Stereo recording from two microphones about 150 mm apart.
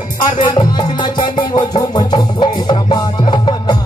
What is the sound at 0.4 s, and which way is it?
Music, 30° left (ahead or behind).